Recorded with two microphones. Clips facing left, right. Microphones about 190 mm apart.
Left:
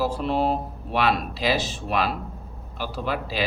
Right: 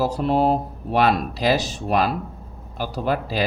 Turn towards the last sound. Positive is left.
turn(degrees=-45)  # may be behind; listen again after turning